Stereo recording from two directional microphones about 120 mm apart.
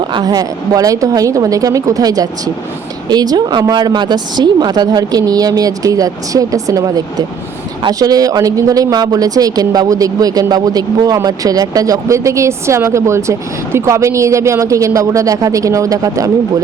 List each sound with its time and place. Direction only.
0.1 s speech: 35° right (ahead or behind)